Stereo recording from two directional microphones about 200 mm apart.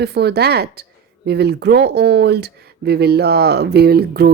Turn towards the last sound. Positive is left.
turn(degrees=-50)  # may be behind; listen again after turning